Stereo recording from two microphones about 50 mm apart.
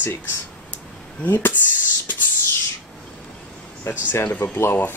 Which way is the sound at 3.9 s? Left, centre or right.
Left.